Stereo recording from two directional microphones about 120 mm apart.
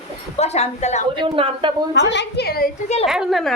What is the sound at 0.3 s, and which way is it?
Speech, 65° left (ahead or behind).